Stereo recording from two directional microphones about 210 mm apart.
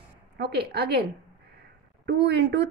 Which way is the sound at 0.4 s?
50° right (ahead or behind).